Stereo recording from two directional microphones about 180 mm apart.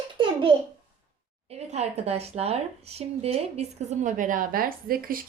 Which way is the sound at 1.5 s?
35° right (ahead or behind).